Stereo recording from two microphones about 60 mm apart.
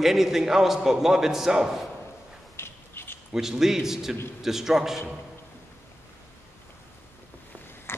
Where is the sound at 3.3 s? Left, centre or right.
Centre.